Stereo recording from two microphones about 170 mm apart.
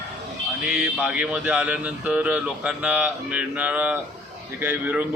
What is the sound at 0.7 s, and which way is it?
A man's voice, 5° right (ahead or behind).